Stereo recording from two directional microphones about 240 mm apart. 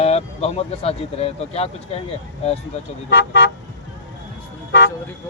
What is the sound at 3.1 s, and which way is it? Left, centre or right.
Speech, left.